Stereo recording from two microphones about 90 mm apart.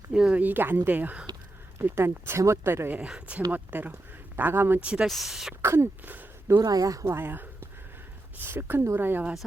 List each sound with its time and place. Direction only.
0.1 s speech: 5° right (ahead or behind)
0.3 s speech: 20° right (ahead or behind)
3.0 s speech: 15° right (ahead or behind)
4.8 s speech: 10° right (ahead or behind)
5.0 s speech: centre (ahead or behind)
5.6 s speech: 30° right (ahead or behind)
6.6 s speech: 45° right (ahead or behind); by 9.3 s 25° right (ahead or behind)